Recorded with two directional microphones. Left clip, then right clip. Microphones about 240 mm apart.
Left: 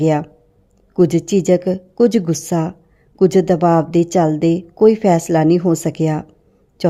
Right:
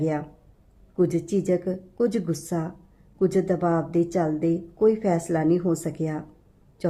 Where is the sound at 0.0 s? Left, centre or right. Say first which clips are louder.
Left 11 dB; left.